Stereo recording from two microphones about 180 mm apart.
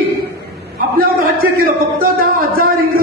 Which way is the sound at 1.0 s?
55° right (ahead or behind).